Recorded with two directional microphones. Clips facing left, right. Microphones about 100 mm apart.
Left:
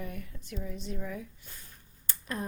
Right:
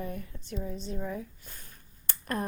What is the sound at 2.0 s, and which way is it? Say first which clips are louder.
Finger snapping: right 4 dB; 55° right (ahead or behind).